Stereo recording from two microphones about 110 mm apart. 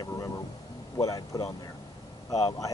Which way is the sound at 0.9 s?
35° left (ahead or behind).